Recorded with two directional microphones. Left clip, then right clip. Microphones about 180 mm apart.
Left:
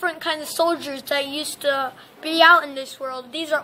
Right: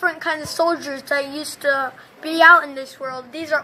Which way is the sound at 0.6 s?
Centre (ahead or behind).